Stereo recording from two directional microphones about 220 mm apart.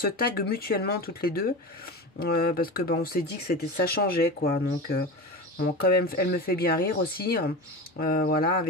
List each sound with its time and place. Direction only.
0.0 s speech: 45° left (ahead or behind)